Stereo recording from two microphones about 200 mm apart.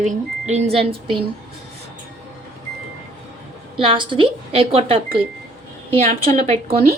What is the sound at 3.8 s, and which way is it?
Speech, 25° right (ahead or behind).